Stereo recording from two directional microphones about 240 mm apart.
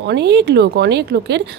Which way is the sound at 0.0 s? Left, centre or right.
Right.